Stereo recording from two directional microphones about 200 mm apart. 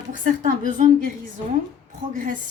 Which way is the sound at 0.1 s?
40° right (ahead or behind).